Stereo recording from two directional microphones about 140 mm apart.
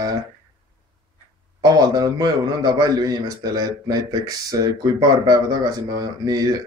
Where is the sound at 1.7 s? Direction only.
30° right (ahead or behind).